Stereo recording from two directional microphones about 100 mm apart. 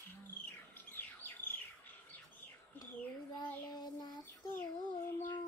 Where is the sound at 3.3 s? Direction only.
45° left (ahead or behind).